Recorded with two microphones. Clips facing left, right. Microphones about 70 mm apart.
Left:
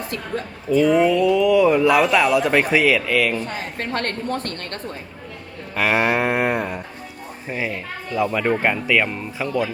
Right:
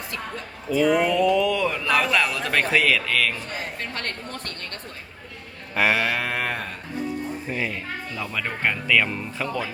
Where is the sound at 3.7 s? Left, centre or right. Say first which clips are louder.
Left 7 dB; left.